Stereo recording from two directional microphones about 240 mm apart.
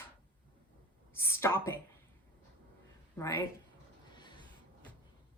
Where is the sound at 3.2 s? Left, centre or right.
Centre.